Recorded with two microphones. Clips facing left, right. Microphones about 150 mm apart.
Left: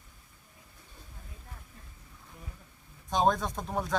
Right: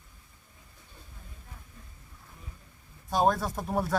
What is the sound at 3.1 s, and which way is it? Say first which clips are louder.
Speech: right 1 dB; 5° right (ahead or behind).